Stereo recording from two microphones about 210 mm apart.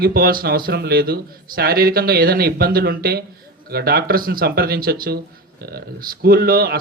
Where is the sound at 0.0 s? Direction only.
45° right (ahead or behind).